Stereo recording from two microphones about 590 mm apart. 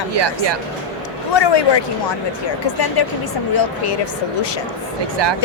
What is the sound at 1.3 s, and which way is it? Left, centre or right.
A woman's voice, left.